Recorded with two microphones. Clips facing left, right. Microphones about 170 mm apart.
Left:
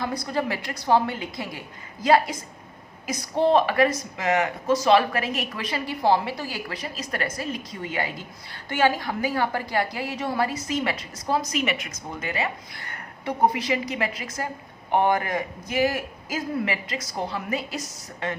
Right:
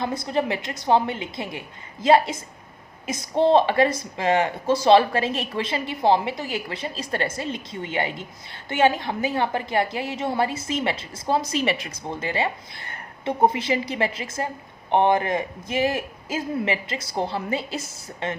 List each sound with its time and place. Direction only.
0.0 s a woman's voice: 25° right (ahead or behind)